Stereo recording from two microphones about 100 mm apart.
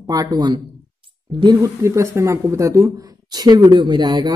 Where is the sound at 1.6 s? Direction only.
30° right (ahead or behind).